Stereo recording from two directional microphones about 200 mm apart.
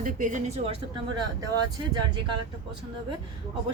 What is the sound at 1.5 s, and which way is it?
Speech, 20° right (ahead or behind).